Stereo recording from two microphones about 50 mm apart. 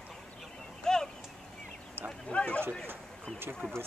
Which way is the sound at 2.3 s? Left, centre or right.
Left.